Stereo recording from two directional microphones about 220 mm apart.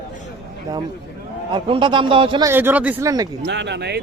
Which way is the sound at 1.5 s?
20° right (ahead or behind).